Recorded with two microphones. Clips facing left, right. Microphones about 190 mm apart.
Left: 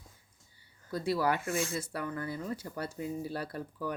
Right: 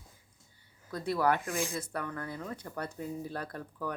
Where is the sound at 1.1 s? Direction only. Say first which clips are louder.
Right 1 dB; 55° right (ahead or behind).